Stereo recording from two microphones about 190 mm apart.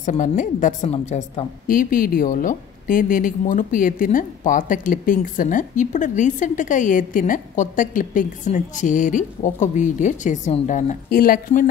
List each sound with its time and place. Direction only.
0.0 s a woman's voice: 40° left (ahead or behind)